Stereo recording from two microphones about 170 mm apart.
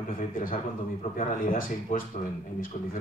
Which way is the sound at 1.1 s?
55° left (ahead or behind).